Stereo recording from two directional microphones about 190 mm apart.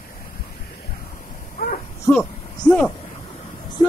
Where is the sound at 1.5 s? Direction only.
45° left (ahead or behind).